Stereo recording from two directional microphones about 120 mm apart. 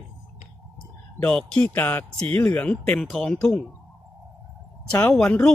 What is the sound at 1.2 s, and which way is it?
Speech, 10° left (ahead or behind).